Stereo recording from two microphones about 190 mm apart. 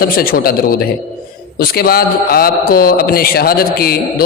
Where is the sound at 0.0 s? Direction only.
50° left (ahead or behind).